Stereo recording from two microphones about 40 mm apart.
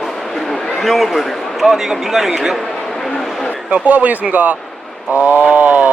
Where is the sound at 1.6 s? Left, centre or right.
Centre.